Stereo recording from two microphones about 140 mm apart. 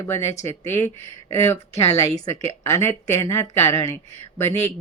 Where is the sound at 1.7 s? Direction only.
50° left (ahead or behind).